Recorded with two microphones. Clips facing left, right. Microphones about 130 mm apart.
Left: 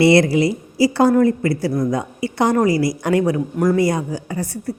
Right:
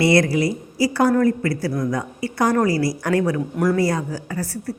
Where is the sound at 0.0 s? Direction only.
25° left (ahead or behind).